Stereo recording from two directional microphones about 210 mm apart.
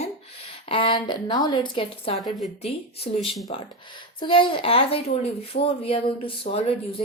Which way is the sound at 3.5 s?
25° left (ahead or behind).